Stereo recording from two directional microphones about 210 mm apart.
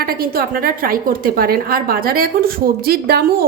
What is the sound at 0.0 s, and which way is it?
A woman's voice, 45° right (ahead or behind).